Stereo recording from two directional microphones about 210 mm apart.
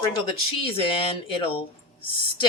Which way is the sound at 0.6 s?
25° left (ahead or behind).